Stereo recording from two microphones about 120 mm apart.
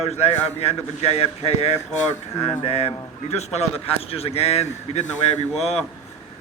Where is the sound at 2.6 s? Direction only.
60° left (ahead or behind).